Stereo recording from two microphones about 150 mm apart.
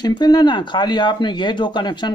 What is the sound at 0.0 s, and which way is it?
Speech, 30° left (ahead or behind).